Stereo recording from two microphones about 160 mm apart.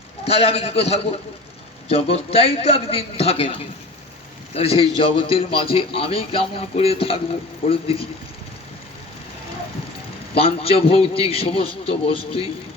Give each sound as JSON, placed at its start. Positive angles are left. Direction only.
{"t": 0.3, "sound": "a man's voice", "side_deg": 40}
{"t": 10.3, "sound": "a man's voice", "side_deg": 35}